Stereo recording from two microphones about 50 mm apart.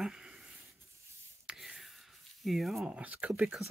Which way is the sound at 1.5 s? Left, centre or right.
Centre.